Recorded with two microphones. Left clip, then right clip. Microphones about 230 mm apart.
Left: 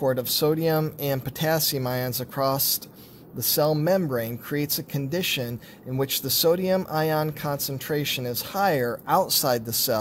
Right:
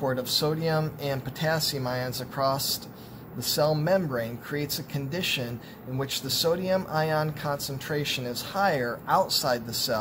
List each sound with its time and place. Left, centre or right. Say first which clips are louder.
0.0 s speech: left 3 dB; left